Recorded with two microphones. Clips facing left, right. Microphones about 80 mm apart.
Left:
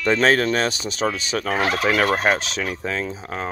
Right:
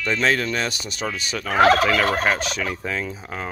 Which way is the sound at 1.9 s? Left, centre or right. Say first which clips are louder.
Left 1 dB; left.